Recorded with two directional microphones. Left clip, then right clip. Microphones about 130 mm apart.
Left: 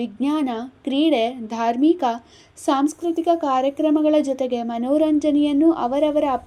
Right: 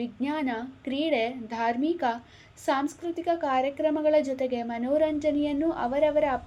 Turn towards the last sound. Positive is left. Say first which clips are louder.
# left 5 dB
turn(degrees=40)  # may be behind; listen again after turning